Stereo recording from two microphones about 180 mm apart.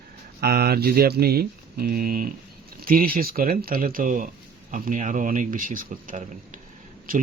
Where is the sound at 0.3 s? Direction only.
60° right (ahead or behind).